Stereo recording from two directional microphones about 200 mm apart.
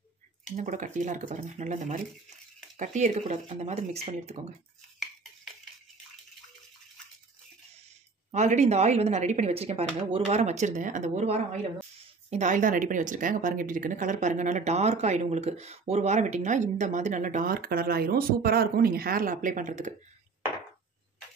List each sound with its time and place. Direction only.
0.6 s a woman's voice: 40° right (ahead or behind)
8.3 s a woman's voice: 35° right (ahead or behind)